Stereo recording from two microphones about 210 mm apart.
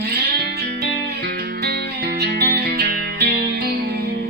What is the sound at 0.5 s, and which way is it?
Music, 50° right (ahead or behind).